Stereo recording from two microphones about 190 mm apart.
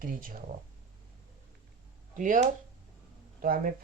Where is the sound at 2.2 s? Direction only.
45° right (ahead or behind).